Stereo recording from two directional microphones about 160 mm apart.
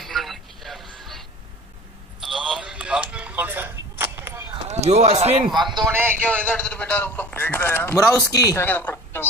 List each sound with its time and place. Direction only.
0.0 s a sound: centre (ahead or behind)
4.6 s speech: 45° right (ahead or behind)
5.9 s a man's voice: 15° right (ahead or behind)
6.2 s a man's voice: 5° left (ahead or behind); by 8.6 s 20° left (ahead or behind)
8.6 s a woman's voice: 10° left (ahead or behind)